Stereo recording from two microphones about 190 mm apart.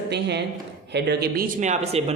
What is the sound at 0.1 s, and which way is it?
A man's voice, 65° right (ahead or behind).